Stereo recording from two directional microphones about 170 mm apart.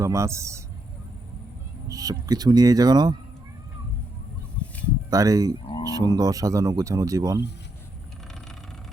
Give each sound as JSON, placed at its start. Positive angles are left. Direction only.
{"t": 0.0, "sound": "speech", "side_deg": -15}
{"t": 1.9, "sound": "speech", "side_deg": -20}
{"t": 5.1, "sound": "speech", "side_deg": -20}